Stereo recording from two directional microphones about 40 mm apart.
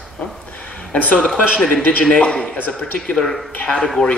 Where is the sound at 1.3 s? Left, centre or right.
Centre.